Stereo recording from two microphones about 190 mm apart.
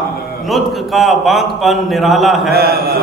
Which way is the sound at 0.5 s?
Centre (ahead or behind).